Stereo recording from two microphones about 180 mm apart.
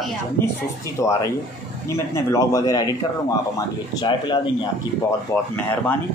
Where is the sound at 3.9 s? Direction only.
25° left (ahead or behind).